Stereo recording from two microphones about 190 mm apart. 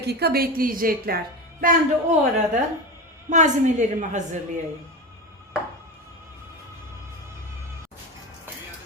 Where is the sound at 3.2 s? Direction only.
40° right (ahead or behind).